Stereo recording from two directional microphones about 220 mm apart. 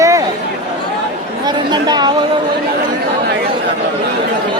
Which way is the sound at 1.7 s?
20° right (ahead or behind).